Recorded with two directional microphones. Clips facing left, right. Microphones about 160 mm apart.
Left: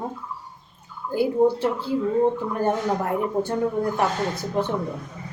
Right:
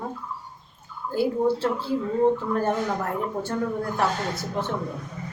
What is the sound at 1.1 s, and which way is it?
Speech, 15° left (ahead or behind).